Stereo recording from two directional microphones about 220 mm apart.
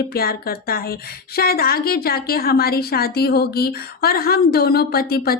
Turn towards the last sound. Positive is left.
turn(degrees=45)  # may be behind; listen again after turning